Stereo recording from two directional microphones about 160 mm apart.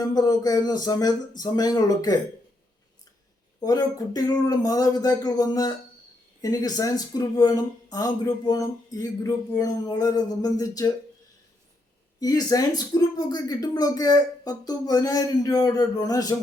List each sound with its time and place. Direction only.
0.0 s speech: 25° left (ahead or behind)
3.6 s speech: 25° left (ahead or behind)
12.2 s speech: 25° left (ahead or behind)